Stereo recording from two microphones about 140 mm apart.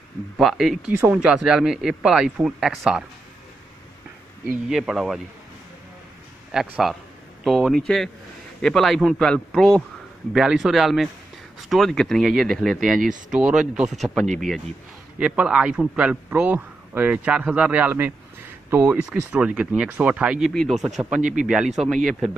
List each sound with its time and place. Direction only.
0.4 s speech: 5° right (ahead or behind)
4.6 s speech: 5° right (ahead or behind)
6.5 s a man's voice: 5° right (ahead or behind)
21.2 s speech: 65° right (ahead or behind)
21.7 s speech: centre (ahead or behind)